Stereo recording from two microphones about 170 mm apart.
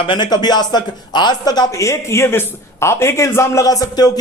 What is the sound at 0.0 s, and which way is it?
Speech, 30° left (ahead or behind).